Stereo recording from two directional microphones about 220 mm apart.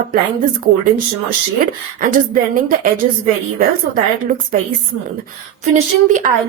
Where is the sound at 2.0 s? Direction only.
40° right (ahead or behind).